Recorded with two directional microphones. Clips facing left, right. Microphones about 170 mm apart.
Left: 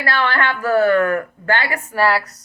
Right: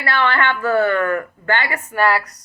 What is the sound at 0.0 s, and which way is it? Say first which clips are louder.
Speech: right 1 dB; 40° left (ahead or behind).